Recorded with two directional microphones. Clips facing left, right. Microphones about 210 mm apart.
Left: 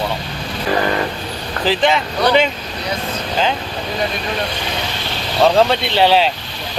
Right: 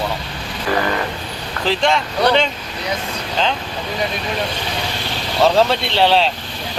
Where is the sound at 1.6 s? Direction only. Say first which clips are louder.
Left 2 dB; 5° left (ahead or behind).